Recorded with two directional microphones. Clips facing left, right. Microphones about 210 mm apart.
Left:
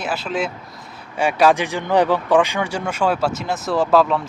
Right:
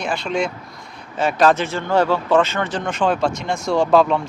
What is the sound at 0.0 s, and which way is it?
Speech, 5° left (ahead or behind).